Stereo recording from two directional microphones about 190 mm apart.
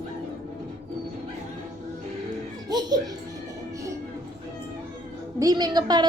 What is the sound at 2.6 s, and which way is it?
Speech, 20° right (ahead or behind).